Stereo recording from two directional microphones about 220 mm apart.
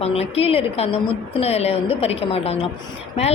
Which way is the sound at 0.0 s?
25° left (ahead or behind).